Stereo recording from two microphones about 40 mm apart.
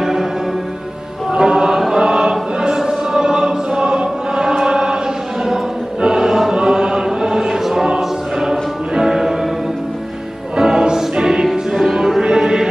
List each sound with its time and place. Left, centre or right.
0.0 s music: centre
1.3 s choir: centre
5.9 s choir: centre
6.5 s chant: centre
8.0 s choir: centre
10.5 s music: centre
12.2 s music: centre